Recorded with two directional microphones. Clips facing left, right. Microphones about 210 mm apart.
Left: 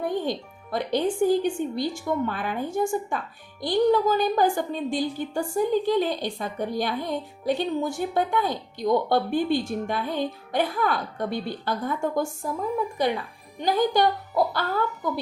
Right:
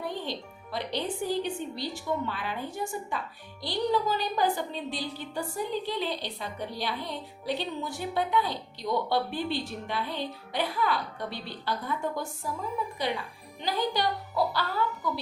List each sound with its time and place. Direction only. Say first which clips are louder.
0.0 s a woman's voice: left 7 dB; 50° left (ahead or behind)
13.6 s a woman's voice: left 7 dB; 50° left (ahead or behind)